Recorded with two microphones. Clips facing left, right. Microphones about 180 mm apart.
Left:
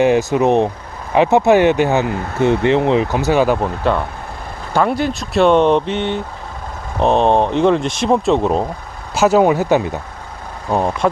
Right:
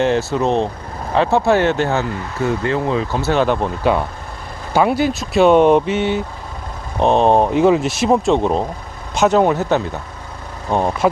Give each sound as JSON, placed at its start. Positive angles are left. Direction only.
{"t": 0.0, "sound": "speech", "side_deg": 15}
{"t": 4.7, "sound": "speech", "side_deg": -5}